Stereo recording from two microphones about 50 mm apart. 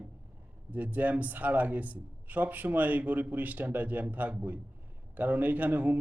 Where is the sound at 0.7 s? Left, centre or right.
Right.